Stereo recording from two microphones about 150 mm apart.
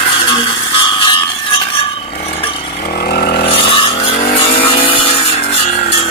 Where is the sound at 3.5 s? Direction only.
35° left (ahead or behind).